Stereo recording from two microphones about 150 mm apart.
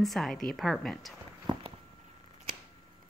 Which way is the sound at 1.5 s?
30° right (ahead or behind).